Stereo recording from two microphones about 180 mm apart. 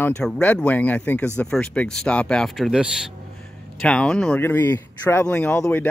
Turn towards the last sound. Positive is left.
turn(degrees=10)  # may be behind; listen again after turning